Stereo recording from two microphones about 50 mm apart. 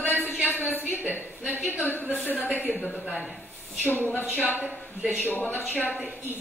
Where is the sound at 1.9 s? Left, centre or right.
Left.